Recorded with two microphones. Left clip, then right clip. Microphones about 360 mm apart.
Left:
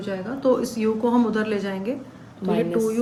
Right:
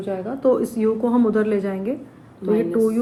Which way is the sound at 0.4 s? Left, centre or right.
Centre.